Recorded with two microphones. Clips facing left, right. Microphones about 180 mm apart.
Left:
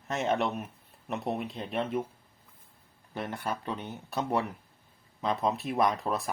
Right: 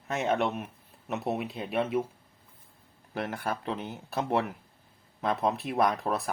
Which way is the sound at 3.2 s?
5° right (ahead or behind).